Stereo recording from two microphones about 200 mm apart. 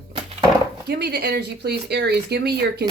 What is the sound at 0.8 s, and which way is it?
Speech, 55° right (ahead or behind).